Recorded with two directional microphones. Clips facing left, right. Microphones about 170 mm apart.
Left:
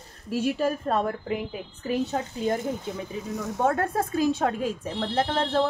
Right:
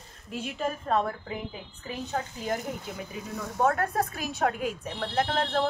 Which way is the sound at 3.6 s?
25° left (ahead or behind).